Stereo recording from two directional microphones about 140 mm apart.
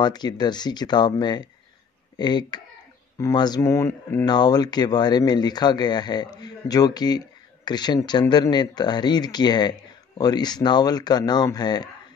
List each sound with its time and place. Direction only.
0.0 s speech: 30° left (ahead or behind)